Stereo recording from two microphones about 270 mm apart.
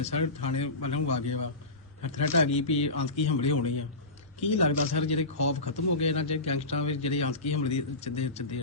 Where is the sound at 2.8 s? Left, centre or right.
Left.